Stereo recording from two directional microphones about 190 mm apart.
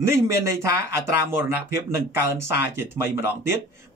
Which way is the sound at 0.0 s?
15° right (ahead or behind).